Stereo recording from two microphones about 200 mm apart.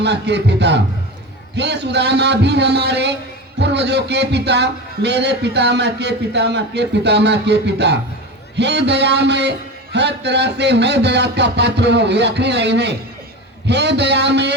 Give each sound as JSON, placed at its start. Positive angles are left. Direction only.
{"t": 0.0, "sound": "a man's voice", "side_deg": -55}